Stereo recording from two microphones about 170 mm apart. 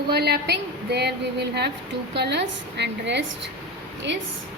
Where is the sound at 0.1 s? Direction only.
70° right (ahead or behind); by 3.2 s 90° right.